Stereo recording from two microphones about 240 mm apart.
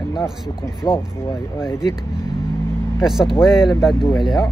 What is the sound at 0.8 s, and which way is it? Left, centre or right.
Speech, centre.